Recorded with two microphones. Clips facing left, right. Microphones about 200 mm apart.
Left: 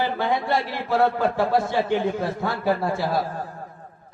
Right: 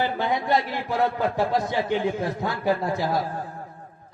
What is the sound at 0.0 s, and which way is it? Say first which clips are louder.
A man's voice: left 1 dB; 20° right (ahead or behind).